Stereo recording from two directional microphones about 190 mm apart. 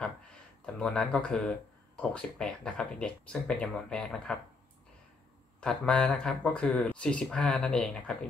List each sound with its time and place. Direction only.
0.7 s speech: 5° left (ahead or behind)
5.6 s speech: 5° left (ahead or behind)